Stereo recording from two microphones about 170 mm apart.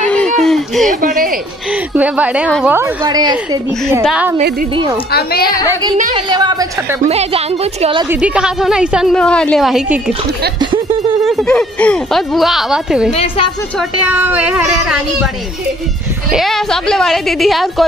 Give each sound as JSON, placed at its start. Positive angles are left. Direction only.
{"t": 0.0, "sound": "a sound", "side_deg": 5}
{"t": 0.8, "sound": "a sound", "side_deg": -50}
{"t": 1.7, "sound": "a woman's voice", "side_deg": -10}
{"t": 4.0, "sound": "a woman's voice", "side_deg": -5}
{"t": 5.1, "sound": "a woman's voice", "side_deg": 65}
{"t": 6.1, "sound": "a woman's voice", "side_deg": -25}
{"t": 7.1, "sound": "a woman's voice", "side_deg": -40}
{"t": 8.1, "sound": "a woman's voice", "side_deg": -5}
{"t": 10.6, "sound": "a sound", "side_deg": -25}
{"t": 11.2, "sound": "a woman's voice", "side_deg": 0}
{"t": 13.1, "sound": "a woman's voice", "side_deg": 35}
{"t": 13.7, "sound": "a woman's voice", "side_deg": -5}
{"t": 16.3, "sound": "a woman's voice", "side_deg": 0}